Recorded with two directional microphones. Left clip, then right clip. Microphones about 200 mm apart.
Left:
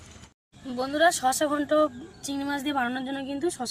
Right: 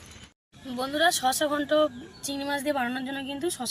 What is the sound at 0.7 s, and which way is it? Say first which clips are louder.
A woman's voice: left 2 dB; centre (ahead or behind).